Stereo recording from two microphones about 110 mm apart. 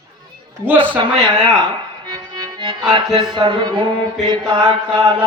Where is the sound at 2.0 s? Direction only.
45° right (ahead or behind).